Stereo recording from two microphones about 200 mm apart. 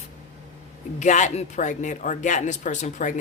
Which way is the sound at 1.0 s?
35° left (ahead or behind).